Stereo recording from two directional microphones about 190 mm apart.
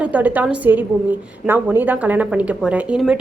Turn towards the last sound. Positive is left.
turn(degrees=-5)  # may be behind; listen again after turning